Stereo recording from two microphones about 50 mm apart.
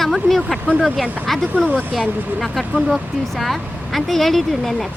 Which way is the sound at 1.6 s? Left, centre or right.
Left.